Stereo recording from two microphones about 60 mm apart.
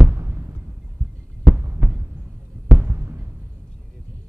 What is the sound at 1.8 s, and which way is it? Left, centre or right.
Heart sounds, centre.